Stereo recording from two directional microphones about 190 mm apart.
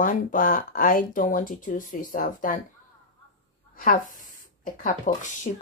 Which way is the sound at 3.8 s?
45° left (ahead or behind).